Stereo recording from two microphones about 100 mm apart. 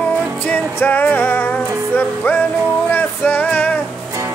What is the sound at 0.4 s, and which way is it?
Music, 20° left (ahead or behind).